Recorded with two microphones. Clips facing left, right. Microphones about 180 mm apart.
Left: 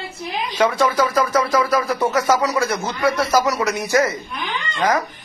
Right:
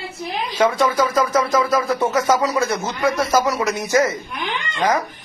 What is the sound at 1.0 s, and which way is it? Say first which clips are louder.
A man's voice: even; 25° right (ahead or behind).